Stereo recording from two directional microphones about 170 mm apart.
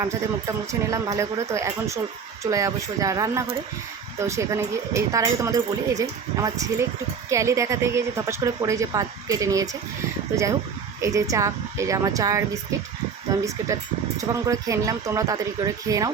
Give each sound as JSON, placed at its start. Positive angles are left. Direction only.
{"t": 0.0, "sound": "speech", "side_deg": -20}
{"t": 11.0, "sound": "speech", "side_deg": -20}